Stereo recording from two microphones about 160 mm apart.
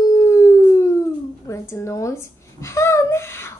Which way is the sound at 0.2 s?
20° left (ahead or behind).